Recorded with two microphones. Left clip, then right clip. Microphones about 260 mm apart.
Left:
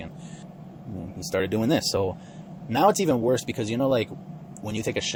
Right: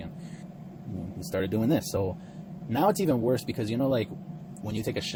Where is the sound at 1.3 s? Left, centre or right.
Left.